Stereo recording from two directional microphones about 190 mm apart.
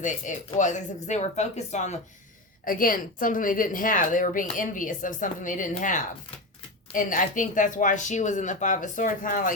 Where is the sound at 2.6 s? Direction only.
45° left (ahead or behind).